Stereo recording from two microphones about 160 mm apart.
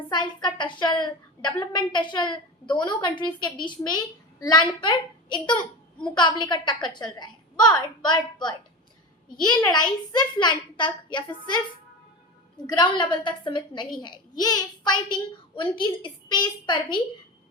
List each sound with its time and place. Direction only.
0.1 s a woman's voice: 30° left (ahead or behind)
12.6 s a woman's voice: 25° left (ahead or behind)